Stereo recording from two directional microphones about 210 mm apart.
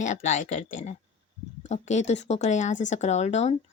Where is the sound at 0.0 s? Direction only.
35° left (ahead or behind).